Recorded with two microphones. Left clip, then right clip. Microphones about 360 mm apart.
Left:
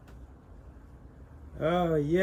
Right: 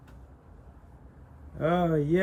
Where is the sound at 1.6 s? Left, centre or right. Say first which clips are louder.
Right 1 dB; right.